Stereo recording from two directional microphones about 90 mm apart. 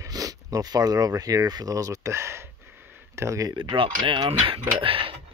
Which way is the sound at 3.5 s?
70° right (ahead or behind).